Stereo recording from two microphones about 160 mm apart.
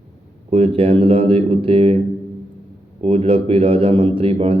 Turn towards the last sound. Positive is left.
turn(degrees=-35)  # may be behind; listen again after turning